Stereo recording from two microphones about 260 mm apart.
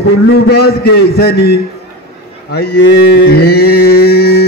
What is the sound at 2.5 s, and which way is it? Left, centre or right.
Mantra, left.